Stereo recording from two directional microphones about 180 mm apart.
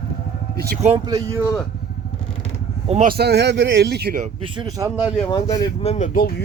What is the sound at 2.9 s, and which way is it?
Speech, 45° right (ahead or behind).